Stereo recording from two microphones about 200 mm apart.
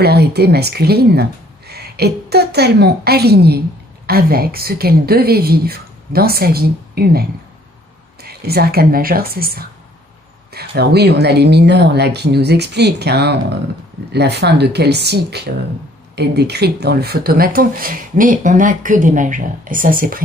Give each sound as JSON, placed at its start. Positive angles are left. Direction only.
{"t": 0.0, "sound": "speech", "side_deg": -55}